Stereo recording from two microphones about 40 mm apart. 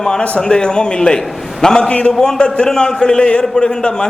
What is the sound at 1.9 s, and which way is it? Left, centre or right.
Speech, left.